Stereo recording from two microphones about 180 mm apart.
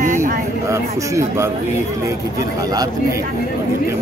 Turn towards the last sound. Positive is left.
turn(degrees=-20)  # may be behind; listen again after turning